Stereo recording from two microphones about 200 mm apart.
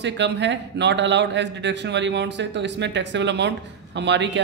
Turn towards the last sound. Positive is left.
turn(degrees=-60)  # may be behind; listen again after turning